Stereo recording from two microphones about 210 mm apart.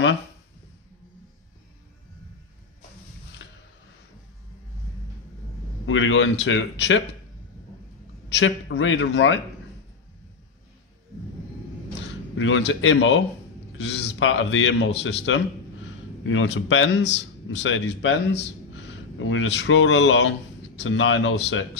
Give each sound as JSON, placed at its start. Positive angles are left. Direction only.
{"t": 3.4, "sound": "a sound", "side_deg": 60}
{"t": 5.9, "sound": "speech", "side_deg": 65}
{"t": 8.3, "sound": "speech", "side_deg": 60}
{"t": 12.4, "sound": "speech", "side_deg": 65}